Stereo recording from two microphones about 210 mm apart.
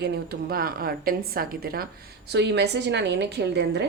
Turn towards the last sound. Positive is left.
turn(degrees=-55)  # may be behind; listen again after turning